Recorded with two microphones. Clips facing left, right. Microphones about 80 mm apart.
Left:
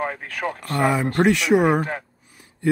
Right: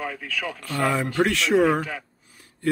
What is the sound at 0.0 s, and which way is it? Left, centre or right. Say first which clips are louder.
Speech: left 4 dB; left.